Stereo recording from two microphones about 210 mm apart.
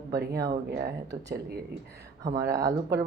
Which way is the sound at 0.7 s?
50° right (ahead or behind).